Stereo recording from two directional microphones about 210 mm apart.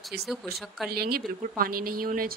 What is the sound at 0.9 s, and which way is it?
Speech, 45° right (ahead or behind).